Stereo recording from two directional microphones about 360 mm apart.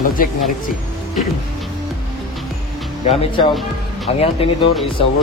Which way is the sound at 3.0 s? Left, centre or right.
Centre.